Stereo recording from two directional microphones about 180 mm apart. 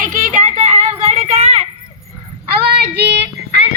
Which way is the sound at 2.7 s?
65° right (ahead or behind).